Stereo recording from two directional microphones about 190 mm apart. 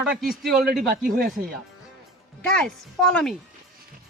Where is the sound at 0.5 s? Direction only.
55° right (ahead or behind).